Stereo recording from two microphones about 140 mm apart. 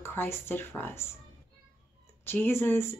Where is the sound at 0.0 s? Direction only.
15° left (ahead or behind).